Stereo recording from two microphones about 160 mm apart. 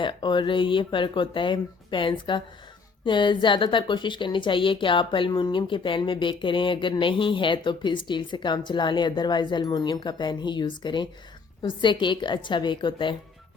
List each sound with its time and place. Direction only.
0.0 s a woman's voice: 30° left (ahead or behind)